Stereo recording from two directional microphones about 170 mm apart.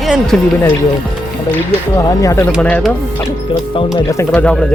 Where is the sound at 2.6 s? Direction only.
5° left (ahead or behind).